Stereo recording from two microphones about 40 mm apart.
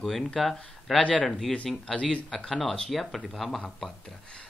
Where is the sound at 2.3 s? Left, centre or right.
Centre.